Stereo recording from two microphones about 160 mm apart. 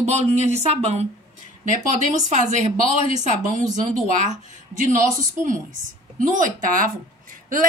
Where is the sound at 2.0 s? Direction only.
50° right (ahead or behind).